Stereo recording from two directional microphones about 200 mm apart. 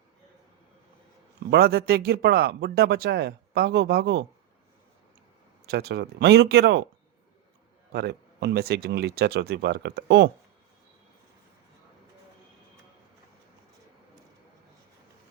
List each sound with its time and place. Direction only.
1.5 s speech: 50° right (ahead or behind)
5.6 s speech: 55° right (ahead or behind)
7.9 s speech: 55° right (ahead or behind)